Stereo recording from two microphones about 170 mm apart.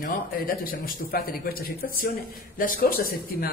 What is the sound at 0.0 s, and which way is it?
Speech, 55° left (ahead or behind).